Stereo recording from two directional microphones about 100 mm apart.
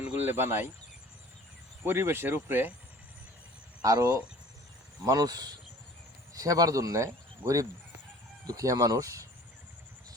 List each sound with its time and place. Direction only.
0.2 s speech: 20° right (ahead or behind)
1.8 s speech: 20° right (ahead or behind)
3.8 s speech: 40° right (ahead or behind)